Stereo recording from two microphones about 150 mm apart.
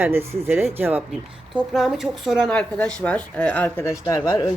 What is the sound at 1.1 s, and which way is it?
Speech, centre (ahead or behind).